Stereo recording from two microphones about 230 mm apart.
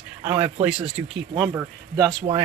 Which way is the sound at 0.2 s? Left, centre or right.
Centre.